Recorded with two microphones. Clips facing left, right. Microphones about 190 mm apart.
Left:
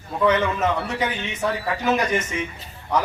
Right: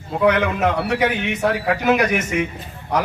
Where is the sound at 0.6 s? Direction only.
65° right (ahead or behind).